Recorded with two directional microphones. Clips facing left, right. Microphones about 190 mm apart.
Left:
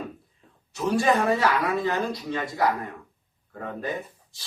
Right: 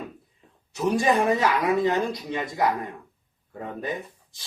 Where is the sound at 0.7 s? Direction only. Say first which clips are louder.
Even; 20° right (ahead or behind).